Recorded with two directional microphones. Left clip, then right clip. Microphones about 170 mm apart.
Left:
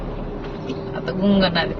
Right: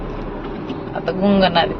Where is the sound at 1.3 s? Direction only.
25° left (ahead or behind).